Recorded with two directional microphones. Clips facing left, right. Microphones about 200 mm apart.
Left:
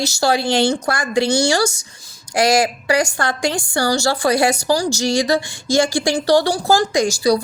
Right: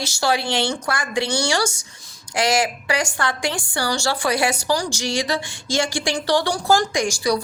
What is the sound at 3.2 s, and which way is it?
A woman's voice, 40° left (ahead or behind).